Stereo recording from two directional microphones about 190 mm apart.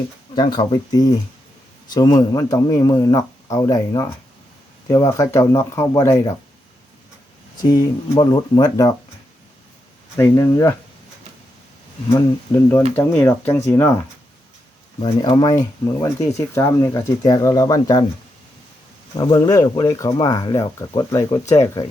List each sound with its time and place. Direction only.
0.3 s speech: 20° left (ahead or behind)
7.7 s speech: 20° left (ahead or behind)
10.2 s speech: 15° left (ahead or behind)
12.1 s speech: 15° left (ahead or behind)
15.0 s speech: 25° left (ahead or behind)
19.1 s speech: 20° left (ahead or behind)